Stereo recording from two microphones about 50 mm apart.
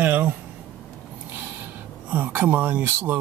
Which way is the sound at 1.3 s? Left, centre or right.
Right.